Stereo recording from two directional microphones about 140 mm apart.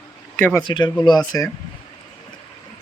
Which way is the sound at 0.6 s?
30° left (ahead or behind).